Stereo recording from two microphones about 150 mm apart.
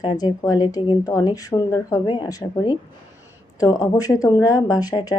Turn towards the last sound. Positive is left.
turn(degrees=25)  # may be behind; listen again after turning